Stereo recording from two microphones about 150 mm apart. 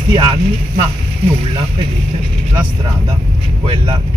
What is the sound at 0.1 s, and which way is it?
Speech, 35° right (ahead or behind).